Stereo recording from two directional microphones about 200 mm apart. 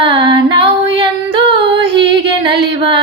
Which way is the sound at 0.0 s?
25° right (ahead or behind).